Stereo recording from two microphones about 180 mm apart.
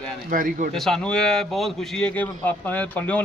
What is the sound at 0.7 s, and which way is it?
A man's voice, centre (ahead or behind).